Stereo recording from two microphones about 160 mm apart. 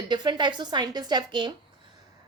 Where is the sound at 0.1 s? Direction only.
30° right (ahead or behind).